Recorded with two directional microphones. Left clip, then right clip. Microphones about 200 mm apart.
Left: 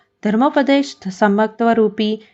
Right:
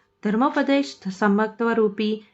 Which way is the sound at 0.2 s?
25° left (ahead or behind).